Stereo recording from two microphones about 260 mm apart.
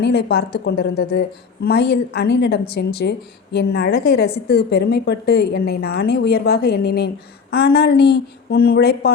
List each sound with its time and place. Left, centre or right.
0.0 s speech: left